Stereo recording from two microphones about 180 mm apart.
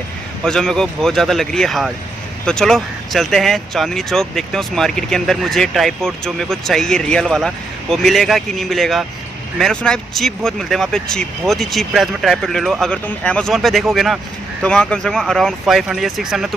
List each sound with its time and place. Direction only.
0.5 s speech: 5° left (ahead or behind)